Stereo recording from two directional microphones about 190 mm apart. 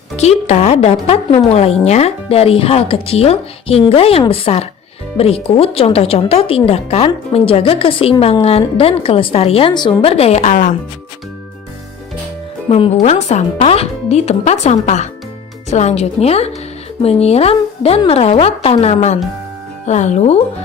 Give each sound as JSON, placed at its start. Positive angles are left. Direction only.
{"t": 0.2, "sound": "speech", "side_deg": 35}
{"t": 12.6, "sound": "speech", "side_deg": 30}